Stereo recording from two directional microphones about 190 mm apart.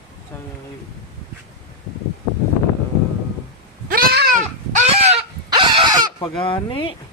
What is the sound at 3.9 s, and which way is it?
Goat, 55° right (ahead or behind).